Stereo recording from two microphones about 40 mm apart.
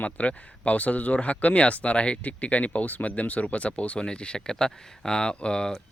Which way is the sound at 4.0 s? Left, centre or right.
Left.